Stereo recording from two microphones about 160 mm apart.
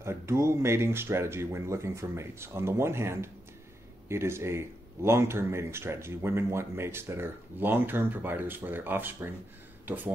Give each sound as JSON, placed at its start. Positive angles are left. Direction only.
{"t": 0.0, "sound": "speech", "side_deg": -15}